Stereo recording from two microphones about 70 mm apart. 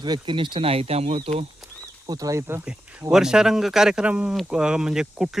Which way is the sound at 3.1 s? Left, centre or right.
Centre.